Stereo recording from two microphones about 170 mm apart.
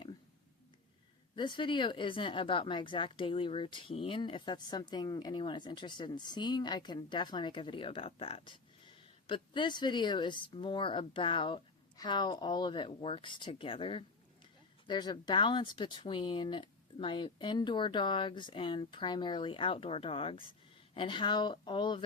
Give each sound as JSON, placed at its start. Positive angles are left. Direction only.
{"t": 1.4, "sound": "speech", "side_deg": 30}